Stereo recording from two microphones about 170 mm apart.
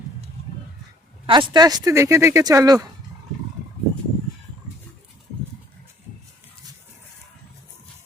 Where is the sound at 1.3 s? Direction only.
25° right (ahead or behind).